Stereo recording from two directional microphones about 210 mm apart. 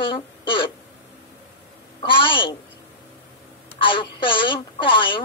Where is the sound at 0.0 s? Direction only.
25° left (ahead or behind).